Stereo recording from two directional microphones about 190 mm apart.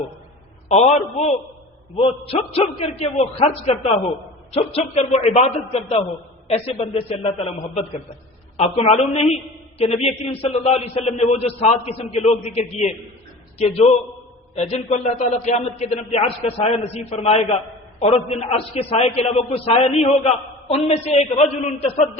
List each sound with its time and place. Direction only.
0.7 s a woman's voice: 35° left (ahead or behind)
8.5 s a woman's voice: 35° left (ahead or behind)